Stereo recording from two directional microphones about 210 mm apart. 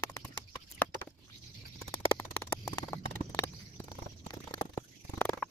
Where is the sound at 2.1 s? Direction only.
10° left (ahead or behind).